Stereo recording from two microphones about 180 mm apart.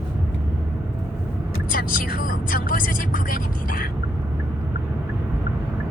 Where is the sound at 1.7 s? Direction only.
50° left (ahead or behind).